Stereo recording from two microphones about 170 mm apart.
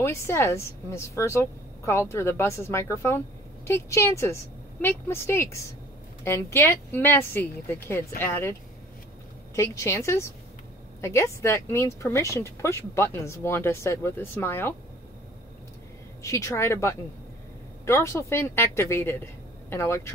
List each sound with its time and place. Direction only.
0.0 s speech: 15° left (ahead or behind)
9.6 s speech: 15° left (ahead or behind)
16.2 s speech: 15° left (ahead or behind)